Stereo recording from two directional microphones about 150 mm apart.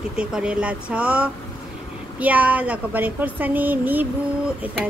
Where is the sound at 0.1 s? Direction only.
5° right (ahead or behind).